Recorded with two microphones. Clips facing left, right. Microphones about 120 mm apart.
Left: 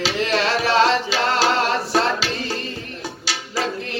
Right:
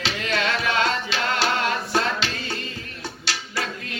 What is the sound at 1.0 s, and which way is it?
Tabla, 35° left (ahead or behind).